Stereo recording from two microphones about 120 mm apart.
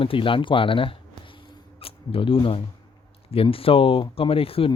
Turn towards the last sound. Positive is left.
turn(degrees=50)  # may be behind; listen again after turning